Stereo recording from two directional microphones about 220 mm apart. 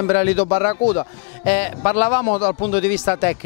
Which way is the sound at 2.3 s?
30° left (ahead or behind).